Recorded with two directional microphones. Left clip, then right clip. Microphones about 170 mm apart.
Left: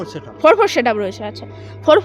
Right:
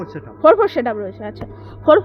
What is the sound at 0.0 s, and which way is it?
Speech, 15° left (ahead or behind).